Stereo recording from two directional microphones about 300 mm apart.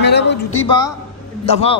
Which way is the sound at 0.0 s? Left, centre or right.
Left.